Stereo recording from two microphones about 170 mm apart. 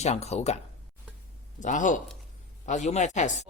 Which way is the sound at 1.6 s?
50° left (ahead or behind).